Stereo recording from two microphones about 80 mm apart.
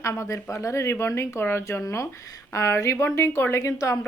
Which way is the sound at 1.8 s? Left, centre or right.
Left.